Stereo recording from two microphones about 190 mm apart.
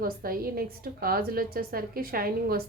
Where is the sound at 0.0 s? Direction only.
50° right (ahead or behind).